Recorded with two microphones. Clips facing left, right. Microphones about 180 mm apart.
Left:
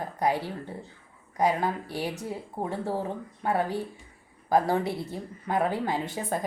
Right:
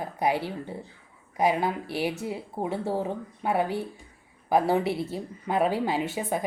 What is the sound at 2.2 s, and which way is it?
A woman's voice, 10° right (ahead or behind).